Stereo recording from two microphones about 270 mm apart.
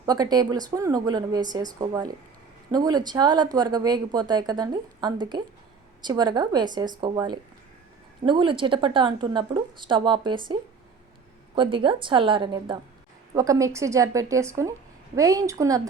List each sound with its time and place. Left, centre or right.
0.0 s speech: centre